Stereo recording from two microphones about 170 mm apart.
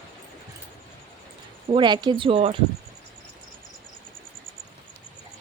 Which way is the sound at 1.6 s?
25° right (ahead or behind).